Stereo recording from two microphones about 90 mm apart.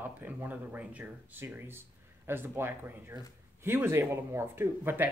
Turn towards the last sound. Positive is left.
turn(degrees=-25)  # may be behind; listen again after turning